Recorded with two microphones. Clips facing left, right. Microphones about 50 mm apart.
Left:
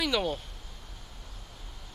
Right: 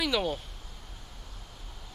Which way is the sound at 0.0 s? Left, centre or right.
Centre.